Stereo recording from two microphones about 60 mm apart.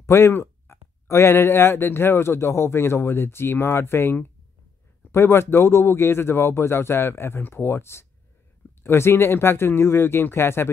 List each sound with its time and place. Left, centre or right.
0.0 s speech: left